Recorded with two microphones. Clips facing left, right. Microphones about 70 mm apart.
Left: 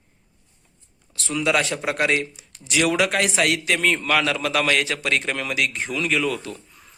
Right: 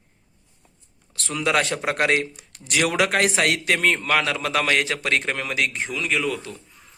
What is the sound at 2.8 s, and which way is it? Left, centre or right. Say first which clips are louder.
A man's voice: even; right.